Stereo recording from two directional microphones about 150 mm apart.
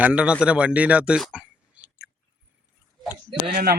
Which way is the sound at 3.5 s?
90° right.